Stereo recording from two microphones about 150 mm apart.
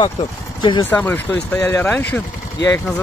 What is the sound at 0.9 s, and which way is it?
Speech, 10° left (ahead or behind).